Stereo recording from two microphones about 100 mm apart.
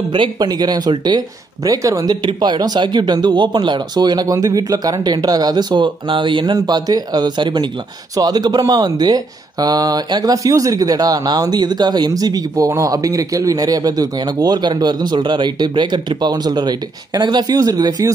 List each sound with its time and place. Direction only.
0.1 s speech: 50° right (ahead or behind); by 2.1 s 35° right (ahead or behind)
2.2 s speech: 50° right (ahead or behind)